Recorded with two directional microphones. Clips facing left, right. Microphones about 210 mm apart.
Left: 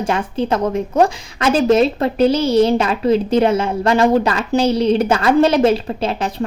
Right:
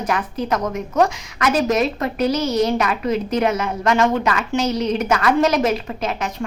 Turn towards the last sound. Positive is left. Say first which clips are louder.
# left 4 dB
turn(degrees=30)  # may be behind; listen again after turning